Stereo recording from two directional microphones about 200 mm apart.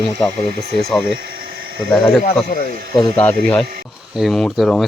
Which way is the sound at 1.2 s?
50° right (ahead or behind).